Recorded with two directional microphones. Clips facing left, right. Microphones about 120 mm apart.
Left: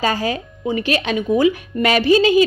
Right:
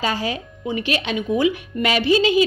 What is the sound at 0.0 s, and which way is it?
A woman's voice, 45° left (ahead or behind).